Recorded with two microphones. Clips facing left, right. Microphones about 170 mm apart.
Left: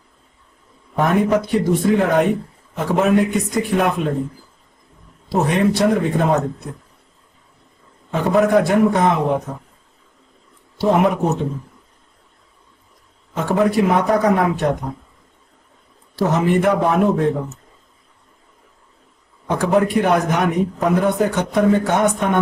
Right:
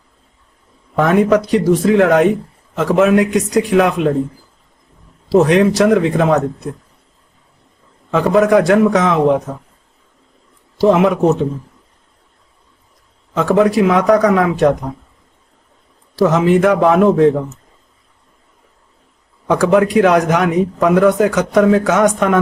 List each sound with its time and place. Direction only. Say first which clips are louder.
0.9 s a man's voice: right 4 dB; 90° right
5.3 s a man's voice: right 6 dB; 90° right
8.1 s a man's voice: right 4 dB; 90° right
10.9 s a man's voice: right 4 dB; 90° right
13.3 s a man's voice: right 5 dB; 90° right
16.2 s a man's voice: right 5 dB; 90° right
19.5 s a man's voice: right 5 dB; 90° right